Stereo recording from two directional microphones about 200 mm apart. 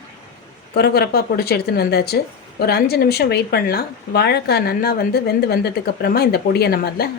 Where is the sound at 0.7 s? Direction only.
55° left (ahead or behind).